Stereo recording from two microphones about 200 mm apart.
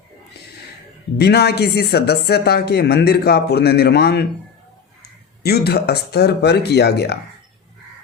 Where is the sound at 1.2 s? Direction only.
55° left (ahead or behind).